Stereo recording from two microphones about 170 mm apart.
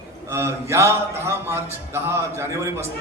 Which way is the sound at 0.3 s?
15° right (ahead or behind).